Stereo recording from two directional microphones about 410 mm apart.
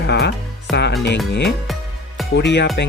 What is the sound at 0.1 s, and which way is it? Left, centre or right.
Music, left.